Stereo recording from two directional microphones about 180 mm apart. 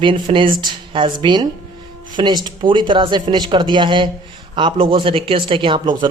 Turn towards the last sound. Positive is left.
turn(degrees=-25)  # may be behind; listen again after turning